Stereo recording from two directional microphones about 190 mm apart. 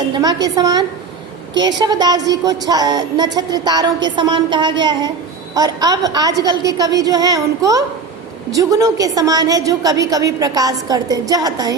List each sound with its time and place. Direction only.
0.1 s a woman's voice: 20° right (ahead or behind)